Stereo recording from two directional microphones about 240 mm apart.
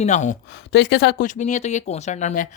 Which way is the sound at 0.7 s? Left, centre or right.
Left.